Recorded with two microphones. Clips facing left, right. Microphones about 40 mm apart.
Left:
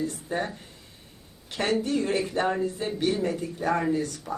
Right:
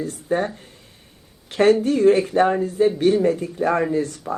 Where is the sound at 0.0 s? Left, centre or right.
Right.